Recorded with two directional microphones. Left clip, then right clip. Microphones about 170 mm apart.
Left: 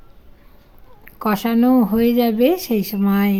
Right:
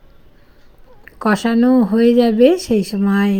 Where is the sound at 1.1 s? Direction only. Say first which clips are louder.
Right 3 dB; 10° right (ahead or behind).